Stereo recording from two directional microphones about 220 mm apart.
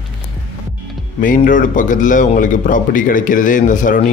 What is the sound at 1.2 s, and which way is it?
Speech, 35° left (ahead or behind).